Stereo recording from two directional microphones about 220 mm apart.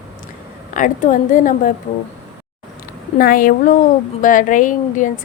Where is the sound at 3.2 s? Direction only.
40° left (ahead or behind).